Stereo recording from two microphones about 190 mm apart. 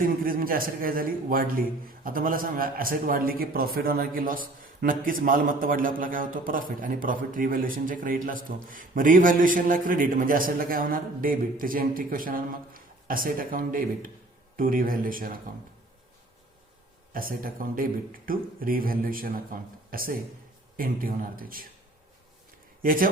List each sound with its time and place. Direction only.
0.0 s a man's voice: 50° right (ahead or behind)
17.1 s a man's voice: 50° right (ahead or behind)
22.8 s speech: 50° right (ahead or behind)